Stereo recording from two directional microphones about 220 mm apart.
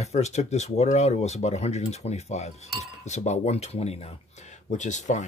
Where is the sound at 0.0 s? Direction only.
30° left (ahead or behind).